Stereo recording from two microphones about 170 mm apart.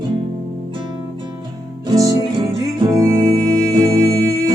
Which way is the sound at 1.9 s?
20° right (ahead or behind).